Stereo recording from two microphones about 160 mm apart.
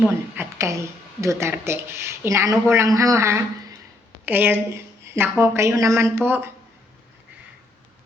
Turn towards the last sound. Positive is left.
turn(degrees=-15)  # may be behind; listen again after turning